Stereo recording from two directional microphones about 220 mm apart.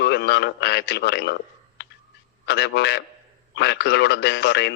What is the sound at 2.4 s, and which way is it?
A man's voice, 50° left (ahead or behind).